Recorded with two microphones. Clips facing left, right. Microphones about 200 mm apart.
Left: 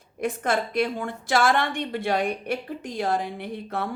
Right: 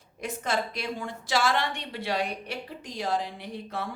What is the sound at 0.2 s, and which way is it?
A woman's voice, 55° left (ahead or behind).